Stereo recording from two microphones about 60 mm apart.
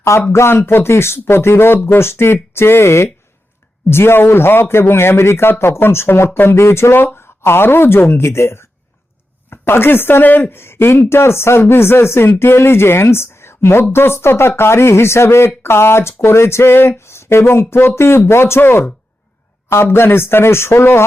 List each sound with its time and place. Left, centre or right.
0.0 s a man's voice: left